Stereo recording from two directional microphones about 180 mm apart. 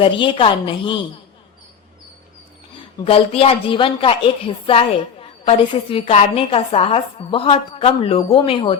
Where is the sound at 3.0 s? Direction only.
30° left (ahead or behind).